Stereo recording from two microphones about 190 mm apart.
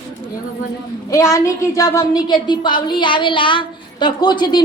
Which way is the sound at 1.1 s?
15° left (ahead or behind).